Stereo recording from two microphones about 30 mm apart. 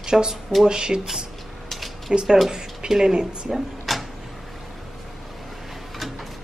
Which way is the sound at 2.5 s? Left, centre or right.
Centre.